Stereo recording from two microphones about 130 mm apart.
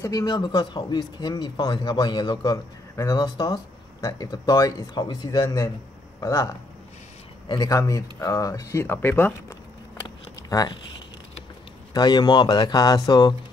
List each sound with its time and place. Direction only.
0.0 s speech: 30° left (ahead or behind)
10.0 s a sound: 30° left (ahead or behind)
11.9 s speech: 30° left (ahead or behind)